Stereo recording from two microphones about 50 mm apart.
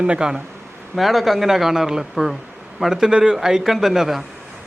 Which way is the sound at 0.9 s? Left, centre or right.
Centre.